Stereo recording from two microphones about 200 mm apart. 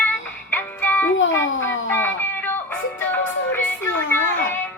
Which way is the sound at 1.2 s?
70° left (ahead or behind).